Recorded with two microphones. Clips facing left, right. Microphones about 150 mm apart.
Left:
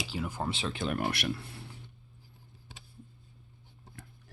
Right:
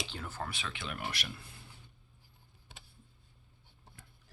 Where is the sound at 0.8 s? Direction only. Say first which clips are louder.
Left 10 dB; 45° left (ahead or behind); by 1.7 s 70° left (ahead or behind).